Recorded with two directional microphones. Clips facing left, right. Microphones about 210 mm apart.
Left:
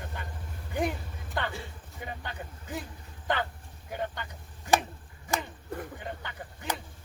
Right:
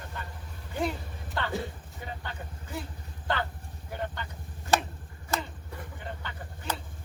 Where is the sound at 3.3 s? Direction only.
15° left (ahead or behind).